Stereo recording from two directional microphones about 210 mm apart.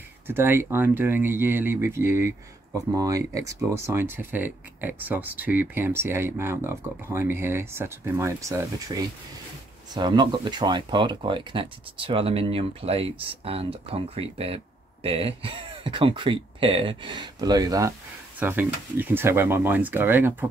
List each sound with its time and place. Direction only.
0.3 s speech: 10° right (ahead or behind)